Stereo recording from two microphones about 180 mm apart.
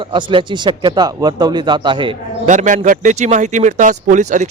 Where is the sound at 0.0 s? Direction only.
25° right (ahead or behind).